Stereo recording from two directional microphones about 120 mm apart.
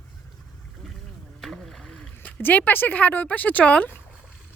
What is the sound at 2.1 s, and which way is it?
Speech, 15° left (ahead or behind).